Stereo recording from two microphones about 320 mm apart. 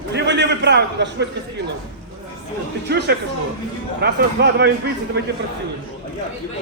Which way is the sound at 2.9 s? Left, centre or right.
Right.